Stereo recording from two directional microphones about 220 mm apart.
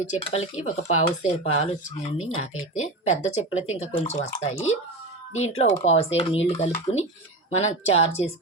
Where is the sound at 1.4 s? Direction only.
30° left (ahead or behind).